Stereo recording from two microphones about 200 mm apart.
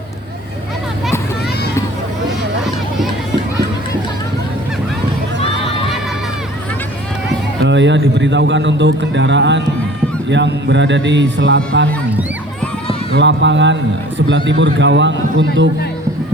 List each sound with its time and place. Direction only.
7.3 s speech: 65° right (ahead or behind)
13.1 s speech: 65° right (ahead or behind)